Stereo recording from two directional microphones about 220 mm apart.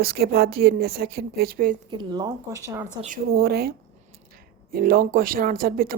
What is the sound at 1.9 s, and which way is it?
Speech, 20° right (ahead or behind).